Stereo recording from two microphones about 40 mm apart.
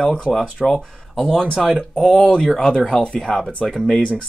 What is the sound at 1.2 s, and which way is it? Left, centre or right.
Speech, centre.